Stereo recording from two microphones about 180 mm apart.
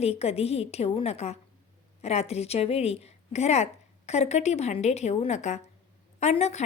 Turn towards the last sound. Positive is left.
turn(degrees=40)  # may be behind; listen again after turning